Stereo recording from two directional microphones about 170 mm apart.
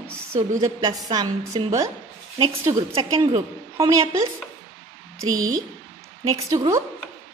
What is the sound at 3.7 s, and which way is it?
Speech, 20° right (ahead or behind).